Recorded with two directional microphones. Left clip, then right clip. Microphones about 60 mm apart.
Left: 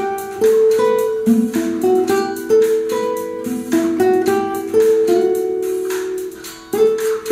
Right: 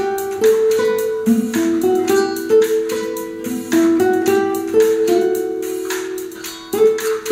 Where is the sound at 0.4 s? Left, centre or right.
Right.